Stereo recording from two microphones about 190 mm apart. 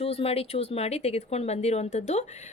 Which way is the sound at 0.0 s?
30° left (ahead or behind).